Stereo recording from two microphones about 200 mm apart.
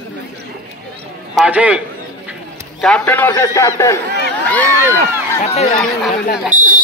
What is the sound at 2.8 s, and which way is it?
A man's voice, 5° left (ahead or behind).